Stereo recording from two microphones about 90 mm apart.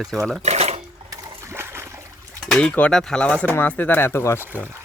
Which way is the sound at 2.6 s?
15° left (ahead or behind).